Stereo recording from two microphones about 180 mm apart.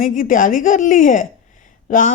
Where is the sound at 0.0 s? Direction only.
50° left (ahead or behind).